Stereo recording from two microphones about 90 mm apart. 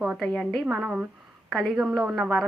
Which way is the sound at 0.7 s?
15° right (ahead or behind).